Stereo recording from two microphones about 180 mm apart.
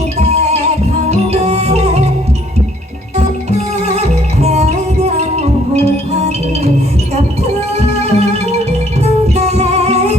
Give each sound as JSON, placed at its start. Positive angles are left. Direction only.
{"t": 0.2, "sound": "music", "side_deg": -35}
{"t": 3.2, "sound": "music", "side_deg": -35}
{"t": 8.0, "sound": "music", "side_deg": -35}